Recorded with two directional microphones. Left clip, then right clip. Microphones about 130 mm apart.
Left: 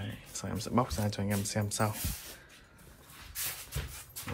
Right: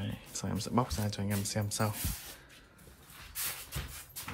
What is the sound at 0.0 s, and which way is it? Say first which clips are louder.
Speech: right 1 dB; 25° right (ahead or behind).